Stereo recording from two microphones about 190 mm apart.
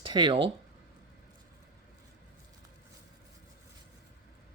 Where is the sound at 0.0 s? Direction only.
25° right (ahead or behind).